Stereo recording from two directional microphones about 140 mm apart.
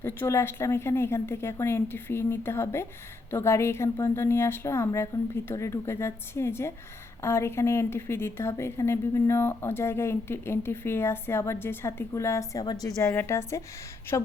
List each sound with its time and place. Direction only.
0.0 s a woman's voice: 15° left (ahead or behind)